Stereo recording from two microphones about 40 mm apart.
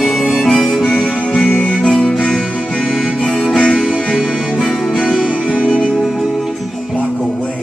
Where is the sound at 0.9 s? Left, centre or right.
Centre.